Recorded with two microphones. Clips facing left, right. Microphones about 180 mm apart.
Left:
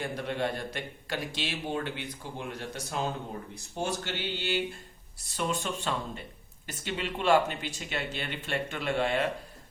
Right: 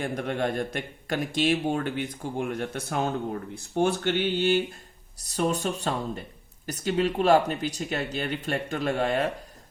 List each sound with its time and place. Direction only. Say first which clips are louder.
0.0 s speech: right 4 dB; 50° right (ahead or behind)